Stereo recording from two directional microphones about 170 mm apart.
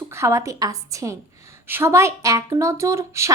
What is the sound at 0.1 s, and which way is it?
A woman's voice, 15° right (ahead or behind).